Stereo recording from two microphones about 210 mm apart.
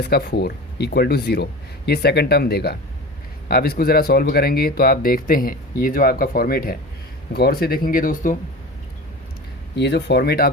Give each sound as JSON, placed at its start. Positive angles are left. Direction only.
{"t": 0.0, "sound": "speech", "side_deg": 50}
{"t": 9.7, "sound": "speech", "side_deg": 55}